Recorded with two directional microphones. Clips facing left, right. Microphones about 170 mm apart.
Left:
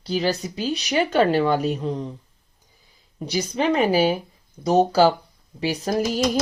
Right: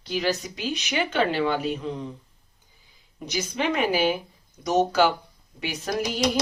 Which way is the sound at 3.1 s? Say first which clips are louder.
Left 4 dB; 35° left (ahead or behind).